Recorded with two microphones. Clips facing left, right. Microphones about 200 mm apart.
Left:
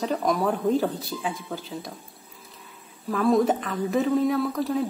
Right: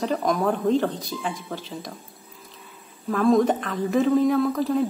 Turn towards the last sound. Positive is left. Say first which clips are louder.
# right 3 dB
turn(degrees=0)  # may be behind; listen again after turning